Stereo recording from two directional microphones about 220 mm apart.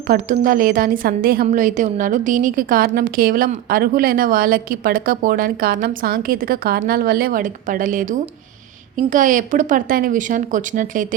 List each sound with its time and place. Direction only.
0.1 s a woman's voice: 40° right (ahead or behind)